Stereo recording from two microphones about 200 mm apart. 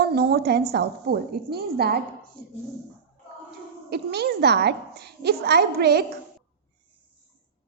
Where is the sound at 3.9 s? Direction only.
55° right (ahead or behind).